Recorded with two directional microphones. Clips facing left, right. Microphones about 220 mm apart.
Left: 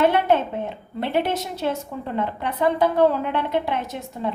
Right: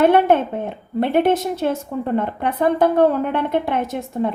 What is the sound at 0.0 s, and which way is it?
A woman's voice, 50° right (ahead or behind).